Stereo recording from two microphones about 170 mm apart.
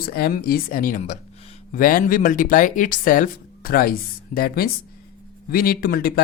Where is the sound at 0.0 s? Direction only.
65° left (ahead or behind).